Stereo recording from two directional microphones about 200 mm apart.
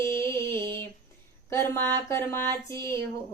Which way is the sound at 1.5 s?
10° left (ahead or behind).